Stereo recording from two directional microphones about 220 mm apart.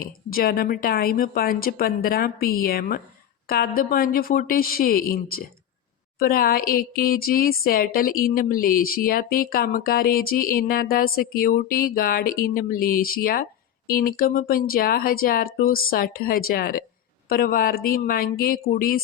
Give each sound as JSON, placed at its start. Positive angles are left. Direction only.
{"t": 0.0, "sound": "a woman's voice", "side_deg": 40}